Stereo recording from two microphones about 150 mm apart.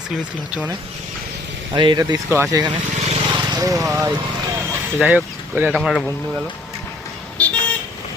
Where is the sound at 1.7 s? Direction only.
30° right (ahead or behind).